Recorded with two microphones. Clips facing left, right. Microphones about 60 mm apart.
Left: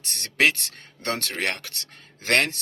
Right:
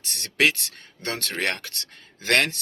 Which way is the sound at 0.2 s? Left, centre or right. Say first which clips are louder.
Even; left.